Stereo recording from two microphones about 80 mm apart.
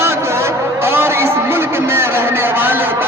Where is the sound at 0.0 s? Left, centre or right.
Right.